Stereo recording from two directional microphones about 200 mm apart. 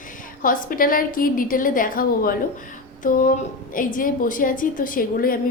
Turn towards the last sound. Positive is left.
turn(degrees=45)  # may be behind; listen again after turning